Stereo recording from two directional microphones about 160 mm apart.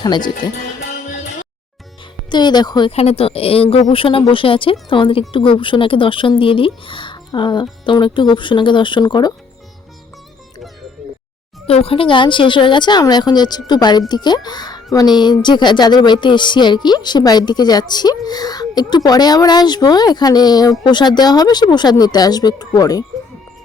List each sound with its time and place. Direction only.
0.0 s speech: 25° left (ahead or behind)
2.3 s speech: 25° left (ahead or behind)
11.7 s speech: 35° left (ahead or behind)